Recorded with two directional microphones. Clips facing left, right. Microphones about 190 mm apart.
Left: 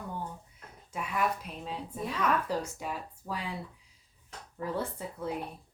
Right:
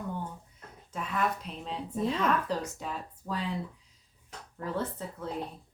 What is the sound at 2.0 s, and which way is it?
Speech, 25° right (ahead or behind).